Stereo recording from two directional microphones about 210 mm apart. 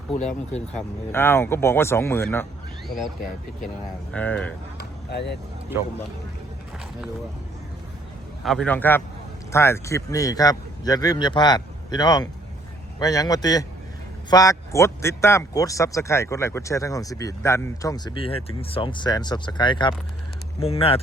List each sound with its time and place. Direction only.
0.8 s speech: 10° left (ahead or behind)
4.1 s speech: 5° left (ahead or behind)
5.1 s speech: 55° left (ahead or behind)
8.4 s speech: 5° left (ahead or behind); by 21.0 s 25° left (ahead or behind)